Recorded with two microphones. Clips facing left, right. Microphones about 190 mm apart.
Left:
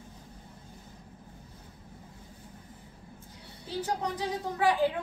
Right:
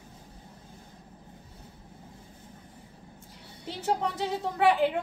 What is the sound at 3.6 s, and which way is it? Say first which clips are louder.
A woman's voice: right 3 dB; 25° right (ahead or behind).